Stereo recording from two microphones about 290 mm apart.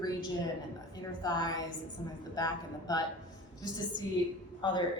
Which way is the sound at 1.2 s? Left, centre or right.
Centre.